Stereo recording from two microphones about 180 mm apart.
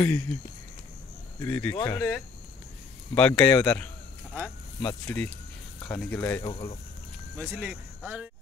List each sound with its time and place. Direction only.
0.0 s speech: 10° left (ahead or behind)
1.4 s speech: 10° left (ahead or behind)
4.8 s speech: 5° left (ahead or behind)
6.4 s speech: 30° left (ahead or behind)
7.3 s speech: 10° right (ahead or behind)